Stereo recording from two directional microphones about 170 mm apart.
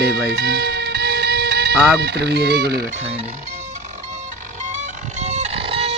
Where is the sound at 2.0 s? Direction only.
75° right (ahead or behind).